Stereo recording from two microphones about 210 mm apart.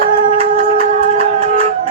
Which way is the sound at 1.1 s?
30° right (ahead or behind).